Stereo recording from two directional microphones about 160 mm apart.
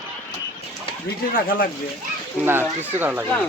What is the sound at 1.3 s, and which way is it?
Speech, 60° left (ahead or behind).